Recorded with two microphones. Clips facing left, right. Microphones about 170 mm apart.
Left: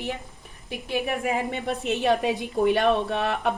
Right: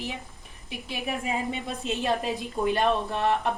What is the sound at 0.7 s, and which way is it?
A woman's voice, 55° left (ahead or behind).